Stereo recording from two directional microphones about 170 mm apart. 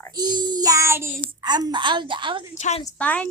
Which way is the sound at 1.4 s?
25° right (ahead or behind).